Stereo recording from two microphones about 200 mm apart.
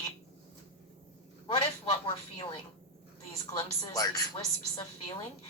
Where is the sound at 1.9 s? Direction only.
25° left (ahead or behind).